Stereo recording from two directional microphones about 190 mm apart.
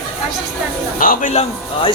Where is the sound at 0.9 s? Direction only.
45° left (ahead or behind).